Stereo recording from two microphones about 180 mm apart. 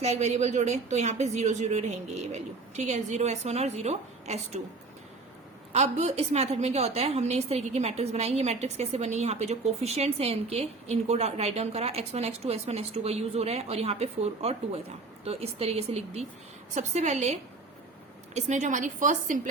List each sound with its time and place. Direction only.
0.0 s a woman's voice: 40° right (ahead or behind)
5.7 s a woman's voice: 40° right (ahead or behind)